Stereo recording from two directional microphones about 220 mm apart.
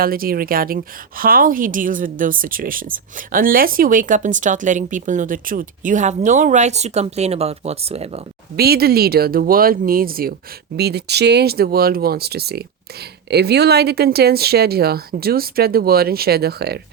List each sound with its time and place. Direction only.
0.0 s a woman's voice: 40° right (ahead or behind)
8.5 s a woman's voice: 45° right (ahead or behind)